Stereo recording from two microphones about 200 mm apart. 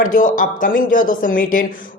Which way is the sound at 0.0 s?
40° left (ahead or behind).